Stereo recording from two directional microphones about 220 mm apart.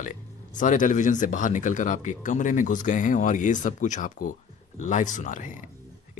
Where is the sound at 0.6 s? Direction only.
35° left (ahead or behind).